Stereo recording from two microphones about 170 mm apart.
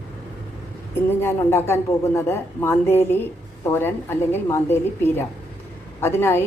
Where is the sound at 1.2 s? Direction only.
15° left (ahead or behind).